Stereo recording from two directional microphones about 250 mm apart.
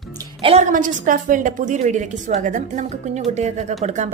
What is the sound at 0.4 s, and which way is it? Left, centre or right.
A woman's voice, right.